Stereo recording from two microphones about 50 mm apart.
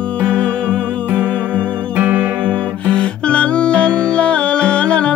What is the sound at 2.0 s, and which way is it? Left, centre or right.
Music, right.